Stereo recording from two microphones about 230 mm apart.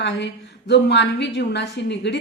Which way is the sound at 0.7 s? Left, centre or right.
Left.